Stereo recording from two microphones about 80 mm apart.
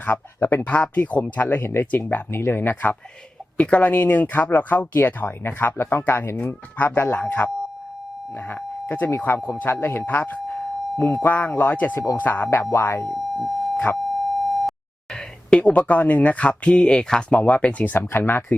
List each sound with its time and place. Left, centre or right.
0.0 s speech: left
8.9 s speech: left
13.1 s a sound: centre
15.1 s speech: centre